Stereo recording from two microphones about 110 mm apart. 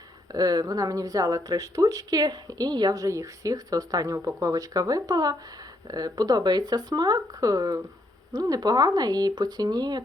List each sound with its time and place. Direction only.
0.3 s speech: 35° right (ahead or behind)